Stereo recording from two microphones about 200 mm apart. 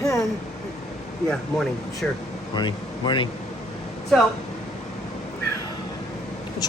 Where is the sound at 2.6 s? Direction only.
25° left (ahead or behind).